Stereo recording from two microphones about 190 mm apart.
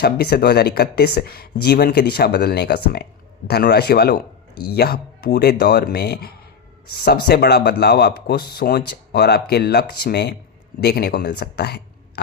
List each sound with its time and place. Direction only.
0.0 s speech: 60° left (ahead or behind)